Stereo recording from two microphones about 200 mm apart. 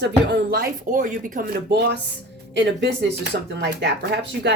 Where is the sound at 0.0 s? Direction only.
55° right (ahead or behind).